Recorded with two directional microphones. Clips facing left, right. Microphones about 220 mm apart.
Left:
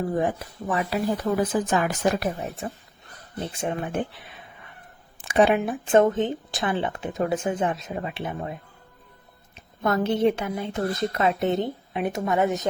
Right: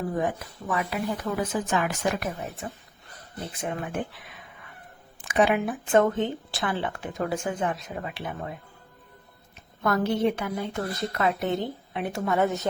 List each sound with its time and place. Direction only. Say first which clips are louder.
0.2 s speech: left 3 dB; 30° left (ahead or behind)
5.3 s speech: left 3 dB; 30° left (ahead or behind)
9.8 s speech: left 2 dB; 25° left (ahead or behind)